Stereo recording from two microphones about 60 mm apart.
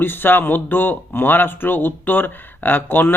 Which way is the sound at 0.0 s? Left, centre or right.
Left.